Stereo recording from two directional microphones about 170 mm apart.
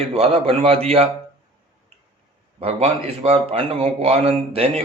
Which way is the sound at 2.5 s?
35° right (ahead or behind).